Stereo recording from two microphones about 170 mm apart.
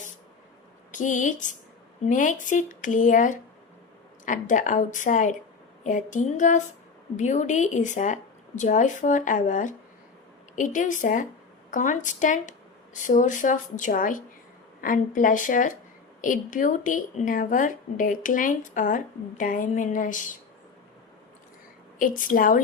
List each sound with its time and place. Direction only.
0.9 s speech: 50° left (ahead or behind)
21.9 s speech: 50° left (ahead or behind)